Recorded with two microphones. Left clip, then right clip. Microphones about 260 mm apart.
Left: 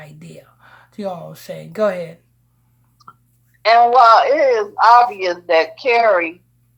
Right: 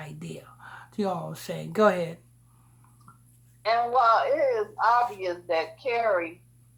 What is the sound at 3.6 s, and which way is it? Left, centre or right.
Speech, left.